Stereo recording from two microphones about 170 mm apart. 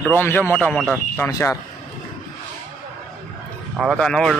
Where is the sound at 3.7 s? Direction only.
5° right (ahead or behind).